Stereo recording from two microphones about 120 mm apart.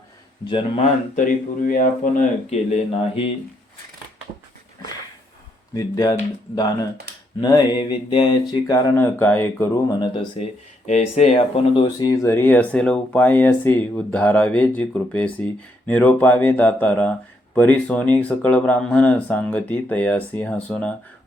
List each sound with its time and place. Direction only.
0.8 s speech: 90° left
2.1 s speech: 65° left (ahead or behind)
5.7 s mantra: 30° left (ahead or behind)
8.7 s speech: 20° left (ahead or behind)
10.4 s speech: 65° left (ahead or behind)
11.9 s speech: 30° left (ahead or behind); by 20.9 s 10° left (ahead or behind)